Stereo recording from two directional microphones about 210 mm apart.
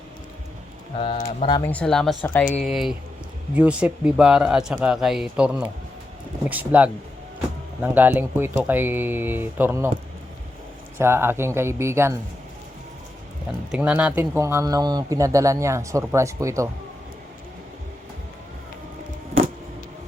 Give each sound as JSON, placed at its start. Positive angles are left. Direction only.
{"t": 0.9, "sound": "speech", "side_deg": 25}
{"t": 1.7, "sound": "speech", "side_deg": 5}
{"t": 10.9, "sound": "speech", "side_deg": -10}
{"t": 13.7, "sound": "speech", "side_deg": -5}